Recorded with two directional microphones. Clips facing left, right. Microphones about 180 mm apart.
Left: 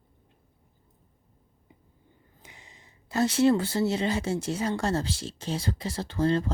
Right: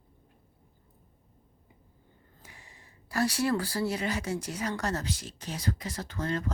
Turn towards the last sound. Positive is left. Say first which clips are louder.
# left 7 dB
turn(degrees=30)  # may be behind; listen again after turning